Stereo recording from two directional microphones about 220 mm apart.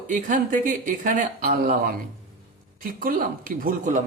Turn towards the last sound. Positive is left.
turn(degrees=-35)  # may be behind; listen again after turning